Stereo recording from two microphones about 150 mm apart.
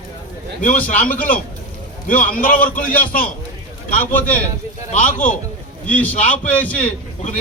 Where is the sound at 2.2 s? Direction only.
65° left (ahead or behind).